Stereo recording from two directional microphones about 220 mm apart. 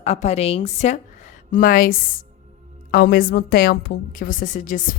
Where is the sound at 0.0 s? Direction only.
30° left (ahead or behind).